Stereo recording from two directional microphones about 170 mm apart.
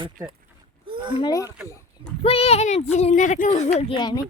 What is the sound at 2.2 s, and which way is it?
Speech, 35° left (ahead or behind).